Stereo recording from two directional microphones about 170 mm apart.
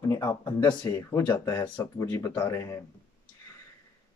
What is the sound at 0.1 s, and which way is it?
Speech, 20° left (ahead or behind).